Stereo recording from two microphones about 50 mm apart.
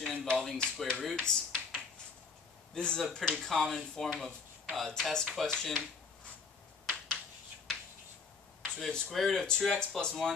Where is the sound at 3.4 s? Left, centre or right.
Centre.